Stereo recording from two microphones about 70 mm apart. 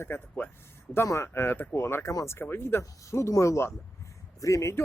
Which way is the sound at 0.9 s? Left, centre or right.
Left.